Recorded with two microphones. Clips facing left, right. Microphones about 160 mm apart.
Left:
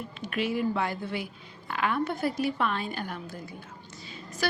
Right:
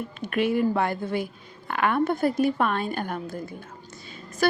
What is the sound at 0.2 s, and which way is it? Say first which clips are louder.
A woman's voice: right 5 dB; 55° right (ahead or behind).